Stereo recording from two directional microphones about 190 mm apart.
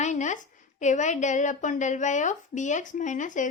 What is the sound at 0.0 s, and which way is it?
Speech, 40° left (ahead or behind).